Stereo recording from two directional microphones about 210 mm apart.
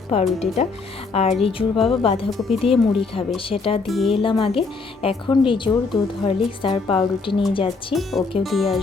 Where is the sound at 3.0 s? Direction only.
25° left (ahead or behind).